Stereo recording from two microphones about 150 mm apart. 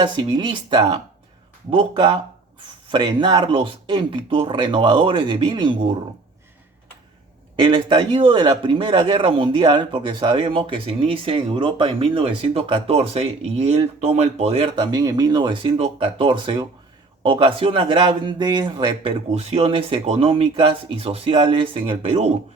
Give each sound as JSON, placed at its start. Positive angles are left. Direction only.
{"t": 0.0, "sound": "a man's voice", "side_deg": -30}
{"t": 7.5, "sound": "a man's voice", "side_deg": -30}
{"t": 19.3, "sound": "a man's voice", "side_deg": -45}